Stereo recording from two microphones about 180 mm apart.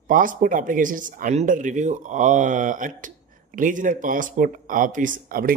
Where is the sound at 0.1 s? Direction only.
45° right (ahead or behind).